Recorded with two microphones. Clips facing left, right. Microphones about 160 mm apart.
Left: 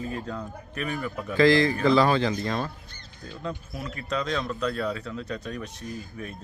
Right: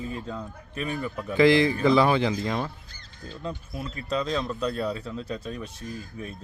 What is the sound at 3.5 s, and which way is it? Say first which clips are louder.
Speech: even; 25° right (ahead or behind).